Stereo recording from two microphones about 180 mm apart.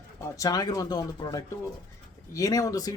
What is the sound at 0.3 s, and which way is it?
Speech, 20° left (ahead or behind).